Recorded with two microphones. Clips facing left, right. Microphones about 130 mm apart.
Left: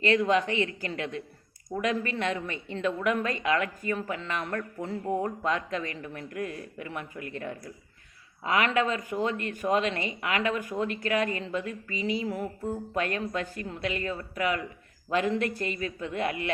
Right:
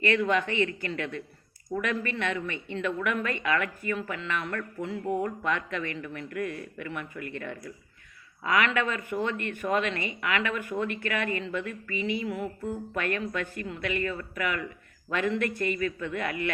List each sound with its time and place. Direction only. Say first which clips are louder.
0.3 s speech: left 1 dB; 35° left (ahead or behind)
11.6 s music: right 1 dB; 60° right (ahead or behind)
12.2 s speech: even; 35° left (ahead or behind)